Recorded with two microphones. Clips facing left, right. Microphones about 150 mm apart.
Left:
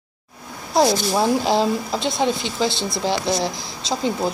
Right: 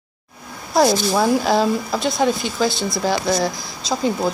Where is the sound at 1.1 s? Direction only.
20° left (ahead or behind).